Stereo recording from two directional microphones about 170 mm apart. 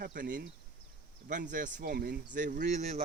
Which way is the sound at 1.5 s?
50° right (ahead or behind).